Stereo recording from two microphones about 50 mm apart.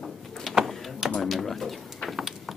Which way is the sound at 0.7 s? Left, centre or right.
Centre.